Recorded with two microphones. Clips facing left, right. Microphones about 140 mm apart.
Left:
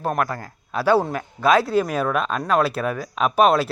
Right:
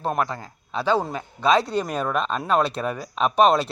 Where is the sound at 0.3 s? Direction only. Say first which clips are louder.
Left 2 dB; 20° right (ahead or behind).